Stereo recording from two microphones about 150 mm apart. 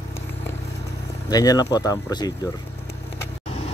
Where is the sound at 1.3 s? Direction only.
25° left (ahead or behind).